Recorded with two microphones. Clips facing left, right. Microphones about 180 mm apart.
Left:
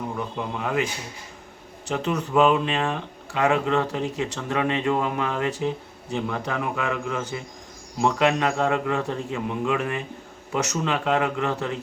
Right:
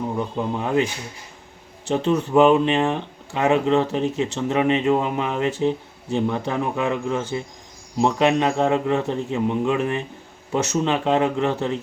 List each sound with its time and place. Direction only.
0.1 s speech: 30° right (ahead or behind)
1.9 s speech: 30° right (ahead or behind)